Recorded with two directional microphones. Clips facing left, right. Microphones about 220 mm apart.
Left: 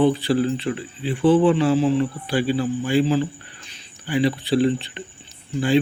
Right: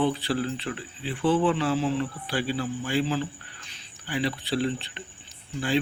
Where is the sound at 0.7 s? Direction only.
20° left (ahead or behind).